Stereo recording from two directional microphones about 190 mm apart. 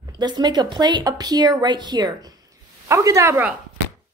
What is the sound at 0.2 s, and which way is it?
A woman's voice, 20° right (ahead or behind).